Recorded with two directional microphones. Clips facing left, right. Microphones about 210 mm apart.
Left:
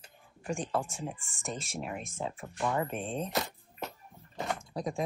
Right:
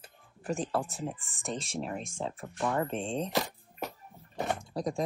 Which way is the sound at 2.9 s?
30° right (ahead or behind).